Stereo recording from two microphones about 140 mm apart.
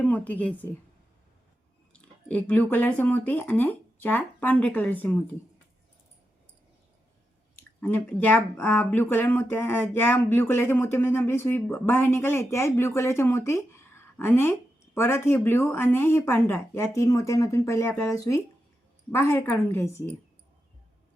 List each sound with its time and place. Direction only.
0.0 s speech: 10° left (ahead or behind)
1.9 s speech: 10° left (ahead or behind)
7.5 s a woman's voice: 15° left (ahead or behind)